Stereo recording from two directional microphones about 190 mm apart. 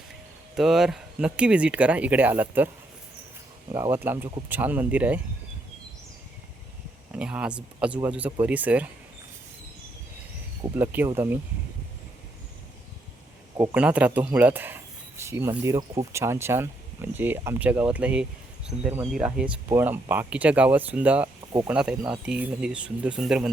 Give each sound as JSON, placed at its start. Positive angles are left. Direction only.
{"t": 0.5, "sound": "speech", "side_deg": 0}
{"t": 3.7, "sound": "speech", "side_deg": -25}
{"t": 3.9, "sound": "speech", "side_deg": -10}
{"t": 7.1, "sound": "speech", "side_deg": -5}
{"t": 10.6, "sound": "speech", "side_deg": -10}
{"t": 13.6, "sound": "speech", "side_deg": -5}